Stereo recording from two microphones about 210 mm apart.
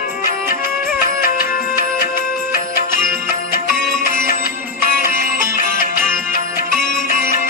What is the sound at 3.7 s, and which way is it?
Music, 45° left (ahead or behind).